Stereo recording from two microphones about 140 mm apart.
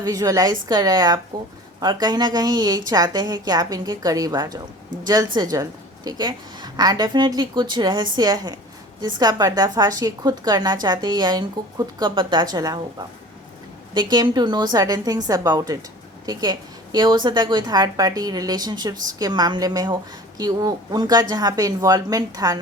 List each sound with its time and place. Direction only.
0.0 s a woman's voice: 25° right (ahead or behind)
13.9 s a woman's voice: 30° right (ahead or behind)